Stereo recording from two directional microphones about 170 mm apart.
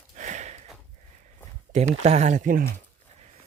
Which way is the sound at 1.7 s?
40° right (ahead or behind).